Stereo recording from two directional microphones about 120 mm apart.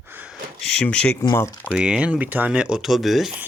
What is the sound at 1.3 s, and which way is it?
Speech, 20° left (ahead or behind).